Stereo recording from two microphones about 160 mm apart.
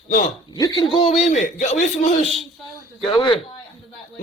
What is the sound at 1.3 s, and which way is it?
Speech, 50° left (ahead or behind).